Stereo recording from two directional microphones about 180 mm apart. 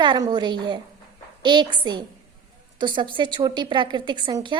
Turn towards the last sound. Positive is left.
turn(degrees=-25)  # may be behind; listen again after turning